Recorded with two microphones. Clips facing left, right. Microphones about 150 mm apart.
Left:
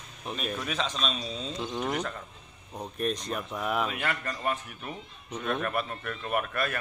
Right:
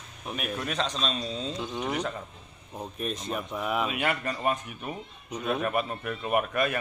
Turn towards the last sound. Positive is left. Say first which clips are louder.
# right 4 dB
turn(degrees=-10)  # may be behind; listen again after turning